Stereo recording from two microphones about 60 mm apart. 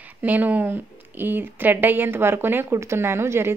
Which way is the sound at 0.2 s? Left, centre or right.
Right.